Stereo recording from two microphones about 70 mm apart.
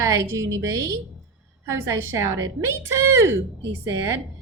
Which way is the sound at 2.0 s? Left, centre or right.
Right.